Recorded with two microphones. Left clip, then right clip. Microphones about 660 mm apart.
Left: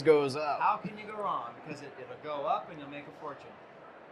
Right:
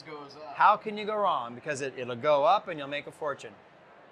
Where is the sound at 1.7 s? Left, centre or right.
Right.